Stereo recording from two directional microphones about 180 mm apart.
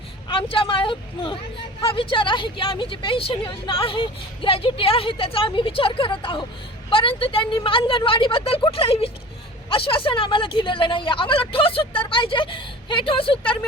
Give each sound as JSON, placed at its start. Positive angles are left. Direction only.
{"t": 0.3, "sound": "a woman's voice", "side_deg": 30}